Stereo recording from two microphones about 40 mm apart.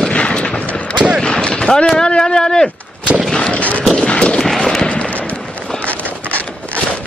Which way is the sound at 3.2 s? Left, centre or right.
Centre.